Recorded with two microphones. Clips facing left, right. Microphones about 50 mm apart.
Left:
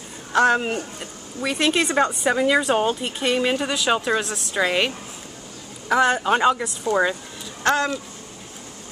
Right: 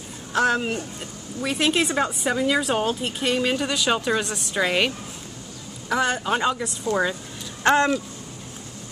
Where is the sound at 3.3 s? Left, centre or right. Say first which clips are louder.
Left 2 dB; centre.